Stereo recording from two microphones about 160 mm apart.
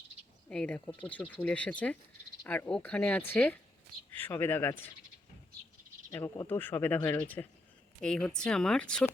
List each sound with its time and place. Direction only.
0.5 s speech: 5° left (ahead or behind)
6.1 s speech: 15° left (ahead or behind)
8.0 s speech: 5° left (ahead or behind)